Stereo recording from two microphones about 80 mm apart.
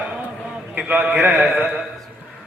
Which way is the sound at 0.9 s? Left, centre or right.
Centre.